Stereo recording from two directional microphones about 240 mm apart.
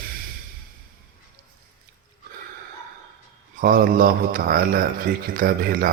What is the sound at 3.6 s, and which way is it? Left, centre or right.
A man's voice, right.